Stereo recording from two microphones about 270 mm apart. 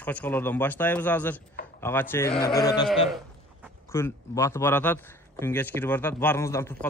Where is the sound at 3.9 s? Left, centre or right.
Centre.